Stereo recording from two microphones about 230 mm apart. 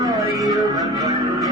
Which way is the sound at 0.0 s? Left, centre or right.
Centre.